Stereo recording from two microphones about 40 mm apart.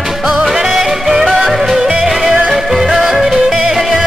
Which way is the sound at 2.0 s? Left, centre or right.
Centre.